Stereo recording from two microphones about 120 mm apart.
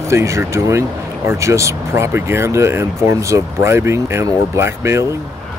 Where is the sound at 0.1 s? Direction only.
25° right (ahead or behind).